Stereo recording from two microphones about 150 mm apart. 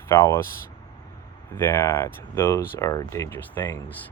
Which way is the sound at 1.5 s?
15° left (ahead or behind).